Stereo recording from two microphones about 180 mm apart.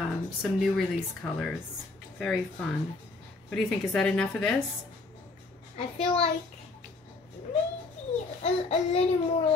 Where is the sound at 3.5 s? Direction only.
5° left (ahead or behind).